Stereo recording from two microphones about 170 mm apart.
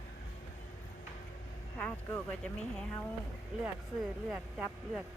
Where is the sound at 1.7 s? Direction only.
10° left (ahead or behind).